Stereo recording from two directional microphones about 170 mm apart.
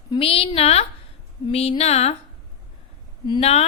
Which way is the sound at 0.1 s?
35° left (ahead or behind).